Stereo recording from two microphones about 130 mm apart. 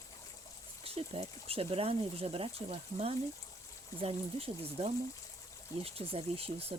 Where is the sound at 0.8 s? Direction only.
50° right (ahead or behind).